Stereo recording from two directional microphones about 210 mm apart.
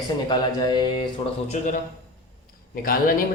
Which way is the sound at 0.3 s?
20° left (ahead or behind).